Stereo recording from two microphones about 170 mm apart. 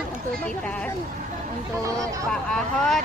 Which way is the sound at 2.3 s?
5° left (ahead or behind).